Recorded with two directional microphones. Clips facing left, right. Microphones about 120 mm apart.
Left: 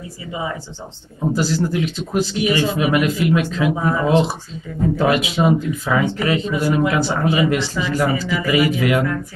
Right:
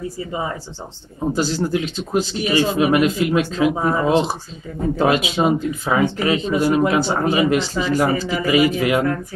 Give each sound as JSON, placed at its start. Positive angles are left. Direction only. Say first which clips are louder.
{"t": 0.3, "sound": "speech", "louder": "left 2 dB", "side_deg": -40}
{"t": 1.3, "sound": "speech", "louder": "even", "side_deg": -25}